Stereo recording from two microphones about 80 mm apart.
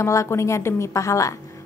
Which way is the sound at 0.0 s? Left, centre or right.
Left.